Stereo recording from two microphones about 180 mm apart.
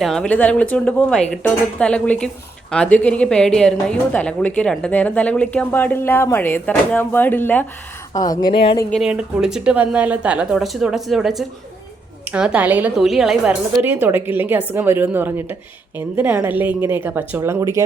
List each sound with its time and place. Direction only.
0.0 s speech: 5° left (ahead or behind)
8.1 s speech: 20° left (ahead or behind)
8.9 s a woman's voice: centre (ahead or behind)